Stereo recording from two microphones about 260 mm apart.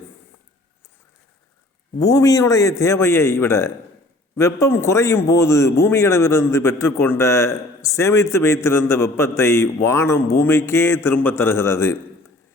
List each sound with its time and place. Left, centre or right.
2.0 s a man's voice: centre